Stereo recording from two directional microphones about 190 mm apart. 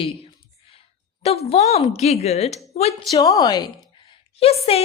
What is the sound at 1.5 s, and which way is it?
Speech, 35° left (ahead or behind).